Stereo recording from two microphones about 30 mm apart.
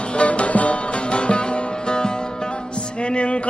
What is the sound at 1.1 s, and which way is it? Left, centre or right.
Music, left.